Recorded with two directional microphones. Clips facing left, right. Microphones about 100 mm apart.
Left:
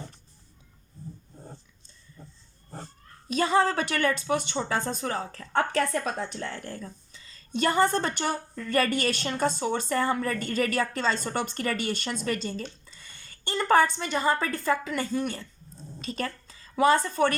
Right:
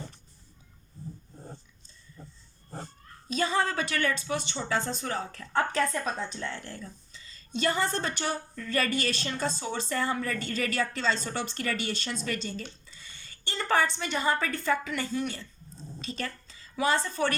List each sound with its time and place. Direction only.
3.3 s a woman's voice: 60° left (ahead or behind); by 5.5 s 40° left (ahead or behind)
5.7 s a woman's voice: 60° left (ahead or behind)